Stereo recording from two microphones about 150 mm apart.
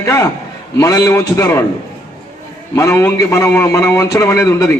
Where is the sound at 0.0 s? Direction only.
20° left (ahead or behind).